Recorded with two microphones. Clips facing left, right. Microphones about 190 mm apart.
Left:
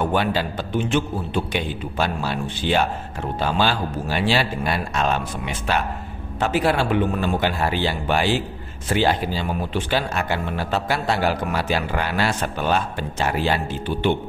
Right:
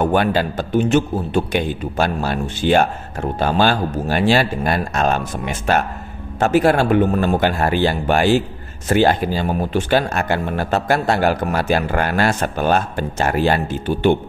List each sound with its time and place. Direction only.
0.0 s a man's voice: 50° right (ahead or behind)